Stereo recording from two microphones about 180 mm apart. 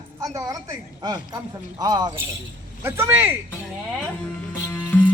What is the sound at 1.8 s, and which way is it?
Speech, 20° right (ahead or behind).